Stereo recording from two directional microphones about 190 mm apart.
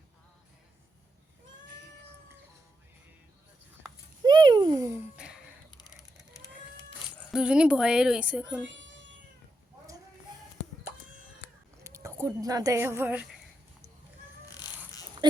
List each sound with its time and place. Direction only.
4.2 s a sound: 25° right (ahead or behind)
5.1 s a sound: 5° right (ahead or behind)
7.3 s a woman's voice: 5° right (ahead or behind)
8.8 s cat: 75° right (ahead or behind)
11.8 s speech: 15° right (ahead or behind)
14.4 s cat: 20° left (ahead or behind)
15.2 s dog: 25° right (ahead or behind)